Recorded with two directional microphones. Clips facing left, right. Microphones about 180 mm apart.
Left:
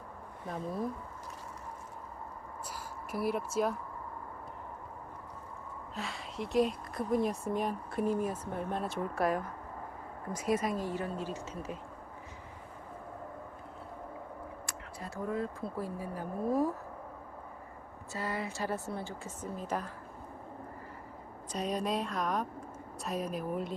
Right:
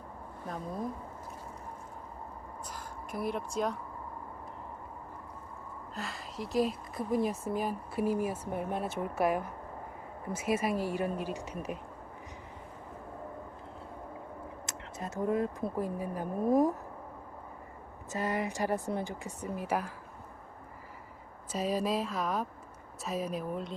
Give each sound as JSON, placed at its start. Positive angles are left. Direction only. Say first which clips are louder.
{"t": 2.6, "sound": "a sound", "louder": "left 1 dB", "side_deg": 5}
{"t": 5.9, "sound": "speech", "louder": "even", "side_deg": 0}
{"t": 14.7, "sound": "speech", "louder": "right 3 dB", "side_deg": -20}
{"t": 18.1, "sound": "speech", "louder": "right 4 dB", "side_deg": -20}
{"t": 21.5, "sound": "speech", "louder": "right 2 dB", "side_deg": -5}